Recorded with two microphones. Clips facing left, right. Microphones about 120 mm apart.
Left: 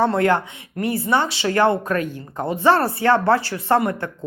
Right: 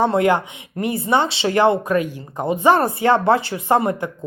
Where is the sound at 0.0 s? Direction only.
15° right (ahead or behind).